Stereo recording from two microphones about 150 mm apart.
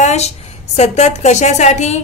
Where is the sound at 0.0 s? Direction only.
45° left (ahead or behind).